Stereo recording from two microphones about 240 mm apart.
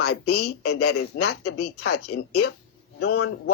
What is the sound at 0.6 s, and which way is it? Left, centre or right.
Speech, left.